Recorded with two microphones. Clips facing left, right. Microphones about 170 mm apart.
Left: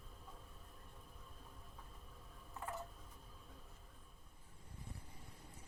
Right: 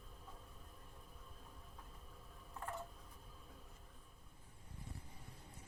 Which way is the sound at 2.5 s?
Centre (ahead or behind).